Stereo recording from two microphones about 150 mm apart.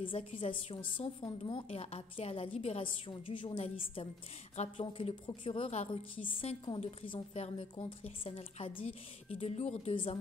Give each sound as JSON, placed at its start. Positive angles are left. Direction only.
{"t": 0.0, "sound": "a woman's voice", "side_deg": 35}